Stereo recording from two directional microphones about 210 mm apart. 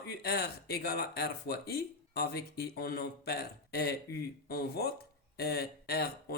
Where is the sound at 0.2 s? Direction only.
50° left (ahead or behind).